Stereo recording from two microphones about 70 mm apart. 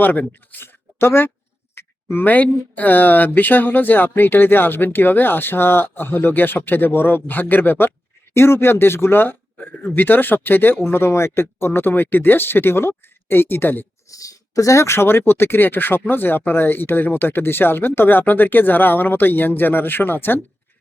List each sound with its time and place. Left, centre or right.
0.0 s speech: left
14.1 s speech: left